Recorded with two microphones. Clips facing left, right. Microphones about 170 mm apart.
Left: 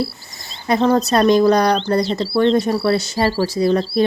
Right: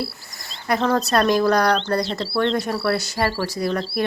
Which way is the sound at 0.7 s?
25° left (ahead or behind).